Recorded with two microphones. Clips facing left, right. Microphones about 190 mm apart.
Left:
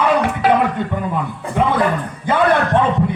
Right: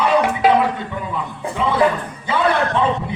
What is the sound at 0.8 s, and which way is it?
Speech, 55° left (ahead or behind).